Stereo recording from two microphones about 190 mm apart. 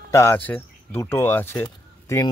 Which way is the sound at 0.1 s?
15° left (ahead or behind).